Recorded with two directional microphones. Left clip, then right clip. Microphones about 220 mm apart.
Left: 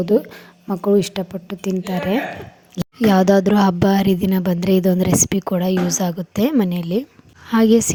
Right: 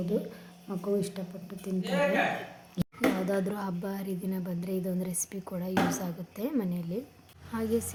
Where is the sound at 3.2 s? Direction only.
40° left (ahead or behind).